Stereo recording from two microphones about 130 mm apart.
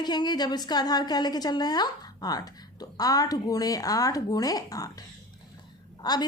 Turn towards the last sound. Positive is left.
turn(degrees=30)  # may be behind; listen again after turning